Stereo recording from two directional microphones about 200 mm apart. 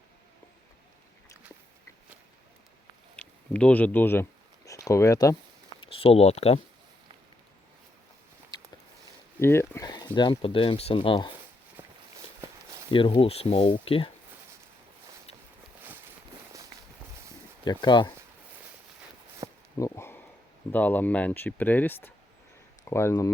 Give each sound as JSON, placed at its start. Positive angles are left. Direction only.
{"t": 3.2, "sound": "a sound", "side_deg": 5}
{"t": 5.8, "sound": "speech", "side_deg": 25}
{"t": 9.4, "sound": "speech", "side_deg": 10}
{"t": 11.8, "sound": "walk", "side_deg": -15}
{"t": 12.9, "sound": "speech", "side_deg": 25}
{"t": 17.7, "sound": "speech", "side_deg": 20}
{"t": 19.7, "sound": "a sound", "side_deg": 15}
{"t": 20.7, "sound": "speech", "side_deg": 10}